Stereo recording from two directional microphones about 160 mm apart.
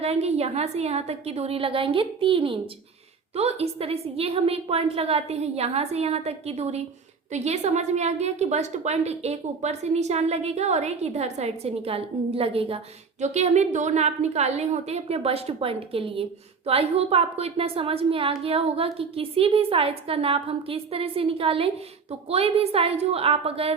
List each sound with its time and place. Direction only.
0.0 s a woman's voice: 40° right (ahead or behind)